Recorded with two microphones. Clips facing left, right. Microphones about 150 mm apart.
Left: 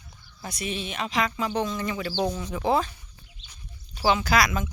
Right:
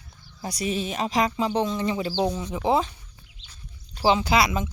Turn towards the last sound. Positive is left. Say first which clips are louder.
# right 1 dB
turn(degrees=-25)  # may be behind; listen again after turning